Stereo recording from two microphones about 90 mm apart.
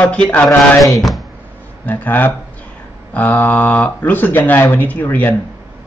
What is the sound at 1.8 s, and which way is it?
Speech, 20° left (ahead or behind).